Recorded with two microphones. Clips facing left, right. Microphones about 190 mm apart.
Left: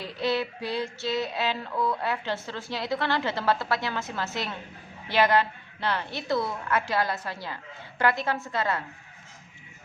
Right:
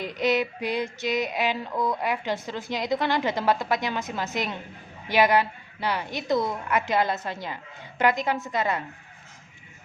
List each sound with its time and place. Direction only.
0.0 s female singing: 20° right (ahead or behind)